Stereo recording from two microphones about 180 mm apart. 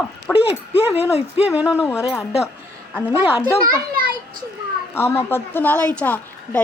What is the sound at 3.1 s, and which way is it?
Speech, 10° right (ahead or behind).